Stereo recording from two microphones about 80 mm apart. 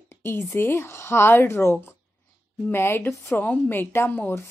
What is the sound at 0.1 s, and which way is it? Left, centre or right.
A woman's voice, left.